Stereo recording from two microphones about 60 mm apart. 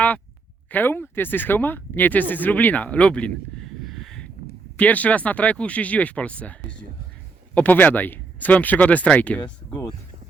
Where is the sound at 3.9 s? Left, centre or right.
Centre.